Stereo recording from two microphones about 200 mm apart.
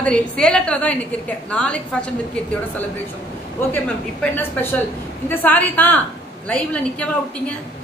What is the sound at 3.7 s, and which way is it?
A woman's voice, 10° left (ahead or behind).